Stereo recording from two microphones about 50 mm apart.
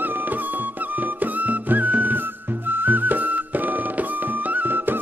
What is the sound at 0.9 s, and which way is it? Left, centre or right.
Music, right.